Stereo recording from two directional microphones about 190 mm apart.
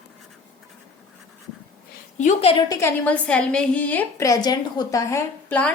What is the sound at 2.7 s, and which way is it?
A woman's voice, 15° left (ahead or behind).